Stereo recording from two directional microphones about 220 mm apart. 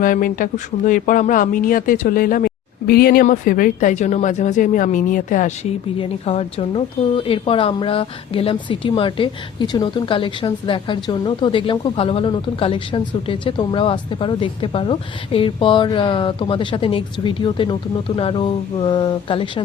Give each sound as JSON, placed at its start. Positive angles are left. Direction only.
{"t": 0.0, "sound": "a woman's voice", "side_deg": 40}